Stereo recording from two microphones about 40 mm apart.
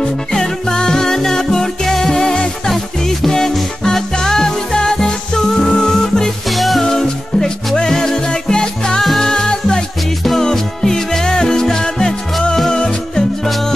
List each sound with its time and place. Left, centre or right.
0.0 s music: centre
6.5 s music: centre
6.8 s music: centre